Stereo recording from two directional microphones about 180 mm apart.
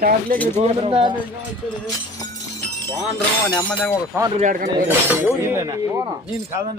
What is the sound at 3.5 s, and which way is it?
Speech, 5° left (ahead or behind).